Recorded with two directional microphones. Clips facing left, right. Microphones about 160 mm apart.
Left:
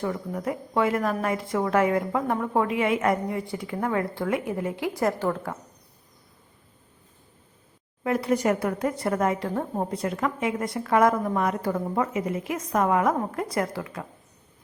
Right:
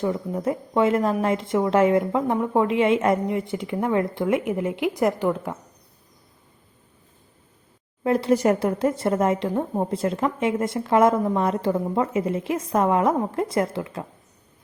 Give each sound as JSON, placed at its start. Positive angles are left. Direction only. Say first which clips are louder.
{"t": 0.0, "sound": "a woman's voice", "louder": "right 4 dB", "side_deg": -20}
{"t": 8.0, "sound": "a woman's voice", "louder": "right 4 dB", "side_deg": -30}